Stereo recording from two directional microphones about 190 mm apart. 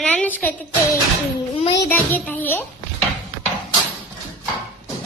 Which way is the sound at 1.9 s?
10° left (ahead or behind).